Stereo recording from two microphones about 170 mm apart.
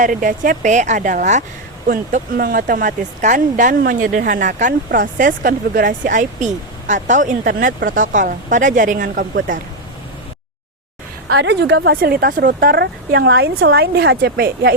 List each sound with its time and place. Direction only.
0.0 s speech: 50° right (ahead or behind)
1.9 s speech: 55° right (ahead or behind)
11.3 s speech: 85° right; by 14.7 s 65° right (ahead or behind)